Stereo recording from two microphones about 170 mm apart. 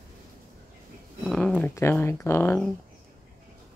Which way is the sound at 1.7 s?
15° left (ahead or behind).